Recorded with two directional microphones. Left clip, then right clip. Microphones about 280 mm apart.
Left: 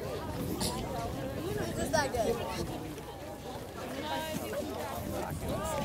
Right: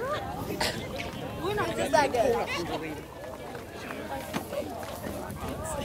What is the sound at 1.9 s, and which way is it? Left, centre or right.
Speech, centre.